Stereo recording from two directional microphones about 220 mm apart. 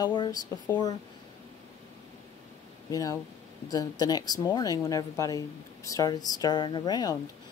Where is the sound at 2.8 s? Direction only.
15° left (ahead or behind).